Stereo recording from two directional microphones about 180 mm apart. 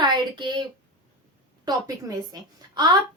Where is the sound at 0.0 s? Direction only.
25° right (ahead or behind).